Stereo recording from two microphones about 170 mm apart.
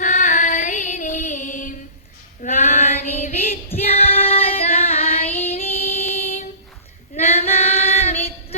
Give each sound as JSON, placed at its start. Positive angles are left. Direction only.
{"t": 0.0, "sound": "music", "side_deg": 45}
{"t": 2.4, "sound": "female singing", "side_deg": 45}
{"t": 5.5, "sound": "music", "side_deg": 40}
{"t": 7.1, "sound": "female singing", "side_deg": 40}